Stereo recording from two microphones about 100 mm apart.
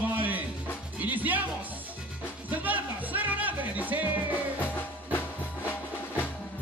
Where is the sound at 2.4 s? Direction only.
15° right (ahead or behind).